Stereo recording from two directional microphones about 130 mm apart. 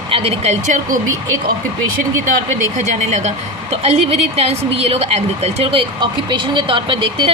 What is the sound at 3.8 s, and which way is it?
Speech, 55° right (ahead or behind).